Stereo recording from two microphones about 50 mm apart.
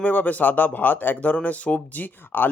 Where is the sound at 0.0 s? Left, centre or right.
Left.